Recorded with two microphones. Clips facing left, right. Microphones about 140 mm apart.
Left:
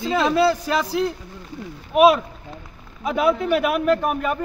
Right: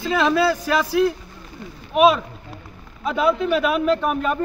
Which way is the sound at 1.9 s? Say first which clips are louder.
Left 1 dB; 5° left (ahead or behind).